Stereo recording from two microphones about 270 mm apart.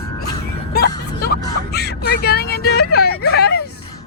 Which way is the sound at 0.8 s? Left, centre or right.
Left.